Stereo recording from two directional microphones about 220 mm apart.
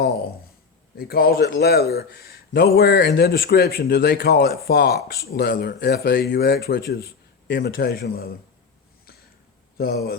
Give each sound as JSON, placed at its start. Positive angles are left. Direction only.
{"t": 0.9, "sound": "a man's voice", "side_deg": 45}
{"t": 9.7, "sound": "a man's voice", "side_deg": 45}